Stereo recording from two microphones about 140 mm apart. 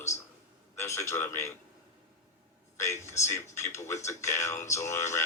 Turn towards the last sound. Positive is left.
turn(degrees=20)  # may be behind; listen again after turning